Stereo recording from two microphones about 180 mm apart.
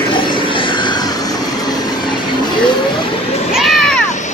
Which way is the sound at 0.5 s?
25° left (ahead or behind).